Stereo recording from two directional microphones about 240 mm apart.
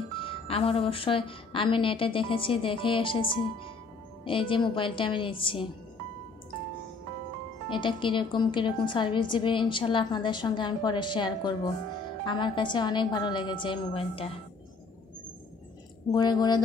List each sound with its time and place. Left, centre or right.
0.2 s a woman's voice: left
7.7 s a woman's voice: centre
16.1 s speech: centre